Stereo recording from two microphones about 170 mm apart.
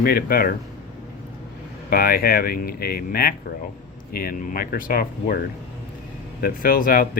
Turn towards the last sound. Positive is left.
turn(degrees=60)  # may be behind; listen again after turning